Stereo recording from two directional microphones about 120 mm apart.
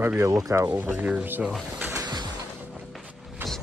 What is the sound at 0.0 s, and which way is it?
Speech, 20° right (ahead or behind).